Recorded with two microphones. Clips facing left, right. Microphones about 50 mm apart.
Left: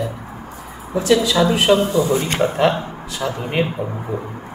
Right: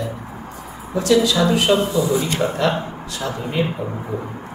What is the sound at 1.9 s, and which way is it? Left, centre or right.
Speech, left.